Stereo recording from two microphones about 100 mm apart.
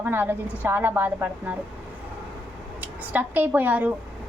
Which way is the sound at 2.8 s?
15° right (ahead or behind).